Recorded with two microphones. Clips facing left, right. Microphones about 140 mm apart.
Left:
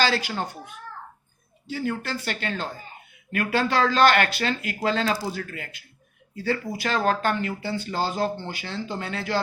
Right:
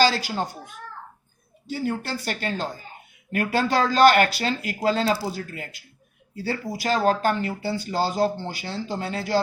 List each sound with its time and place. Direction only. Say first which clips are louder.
0.0 s speech: right 3 dB; 40° right (ahead or behind)
1.7 s speech: right 1 dB; 40° right (ahead or behind)